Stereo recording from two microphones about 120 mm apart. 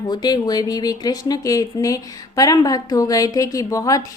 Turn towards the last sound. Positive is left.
turn(degrees=30)  # may be behind; listen again after turning